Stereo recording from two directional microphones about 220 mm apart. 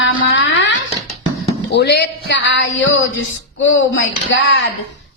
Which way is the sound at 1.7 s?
50° left (ahead or behind).